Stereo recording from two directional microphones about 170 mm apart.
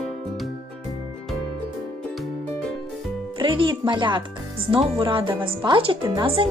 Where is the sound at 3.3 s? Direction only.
30° right (ahead or behind).